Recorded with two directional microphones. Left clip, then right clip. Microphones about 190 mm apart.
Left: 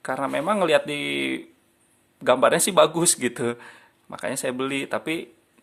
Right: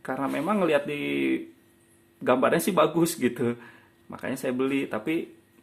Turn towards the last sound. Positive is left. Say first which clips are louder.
# left 1 dB
turn(degrees=30)  # may be behind; listen again after turning